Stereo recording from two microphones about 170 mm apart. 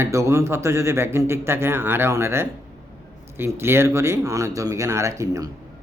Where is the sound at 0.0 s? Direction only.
15° right (ahead or behind).